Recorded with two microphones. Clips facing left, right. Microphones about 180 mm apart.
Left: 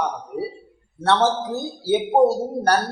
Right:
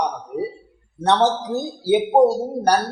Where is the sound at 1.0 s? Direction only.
15° right (ahead or behind).